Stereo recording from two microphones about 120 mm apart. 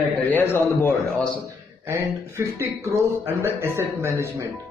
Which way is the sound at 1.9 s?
20° right (ahead or behind).